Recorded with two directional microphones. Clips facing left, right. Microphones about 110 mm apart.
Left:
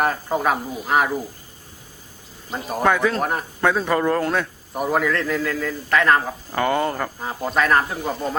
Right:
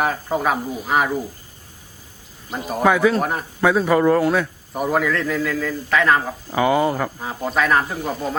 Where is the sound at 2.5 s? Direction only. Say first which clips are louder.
Right 2 dB; centre (ahead or behind).